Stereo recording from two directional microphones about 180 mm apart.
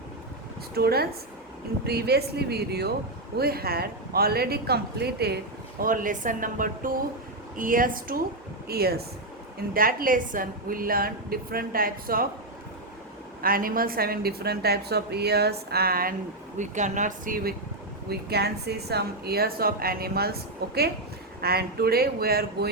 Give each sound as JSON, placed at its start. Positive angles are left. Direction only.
{"t": 0.7, "sound": "a woman's voice", "side_deg": -60}
{"t": 5.8, "sound": "a woman's voice", "side_deg": -50}
{"t": 13.4, "sound": "a woman's voice", "side_deg": -55}
{"t": 16.6, "sound": "a woman's voice", "side_deg": -40}
{"t": 18.1, "sound": "a woman's voice", "side_deg": -60}